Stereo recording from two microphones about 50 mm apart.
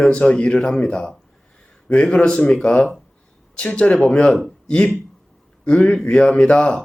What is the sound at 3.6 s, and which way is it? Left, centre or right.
Speech, centre.